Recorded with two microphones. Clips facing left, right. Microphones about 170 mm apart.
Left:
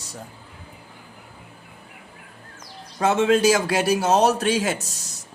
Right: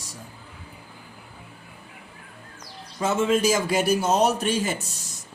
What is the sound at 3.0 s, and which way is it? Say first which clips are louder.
A man's voice: left 4 dB; 75° left (ahead or behind).